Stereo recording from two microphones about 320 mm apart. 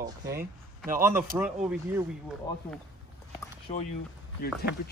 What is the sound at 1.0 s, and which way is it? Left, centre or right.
Speech, centre.